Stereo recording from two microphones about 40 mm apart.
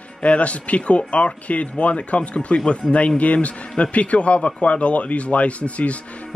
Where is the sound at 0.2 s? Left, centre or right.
Left.